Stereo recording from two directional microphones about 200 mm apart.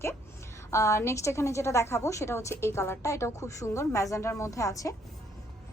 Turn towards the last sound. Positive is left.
turn(degrees=15)  # may be behind; listen again after turning